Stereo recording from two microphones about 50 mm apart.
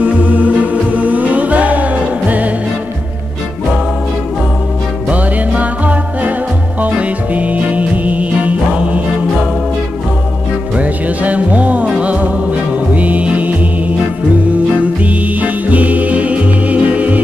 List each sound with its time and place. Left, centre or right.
0.0 s music: right
5.1 s music: right
10.8 s music: right
14.8 s music: right